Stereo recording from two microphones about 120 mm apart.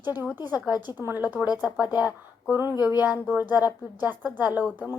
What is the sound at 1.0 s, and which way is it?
A woman's voice, 15° right (ahead or behind).